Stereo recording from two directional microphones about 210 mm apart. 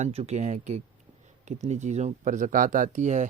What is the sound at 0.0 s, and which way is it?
Speech, 30° right (ahead or behind).